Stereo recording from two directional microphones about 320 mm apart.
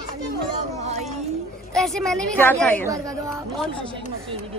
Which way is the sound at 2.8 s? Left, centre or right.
Centre.